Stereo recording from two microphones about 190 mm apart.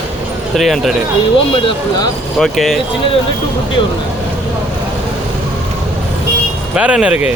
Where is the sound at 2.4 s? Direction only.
Centre (ahead or behind).